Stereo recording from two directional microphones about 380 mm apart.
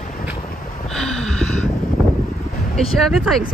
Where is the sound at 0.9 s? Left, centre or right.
Centre.